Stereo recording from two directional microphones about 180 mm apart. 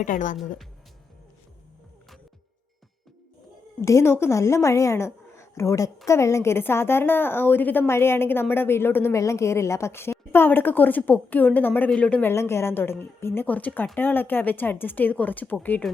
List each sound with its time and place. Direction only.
0.0 s speech: 45° left (ahead or behind)
3.8 s a woman's voice: 15° left (ahead or behind)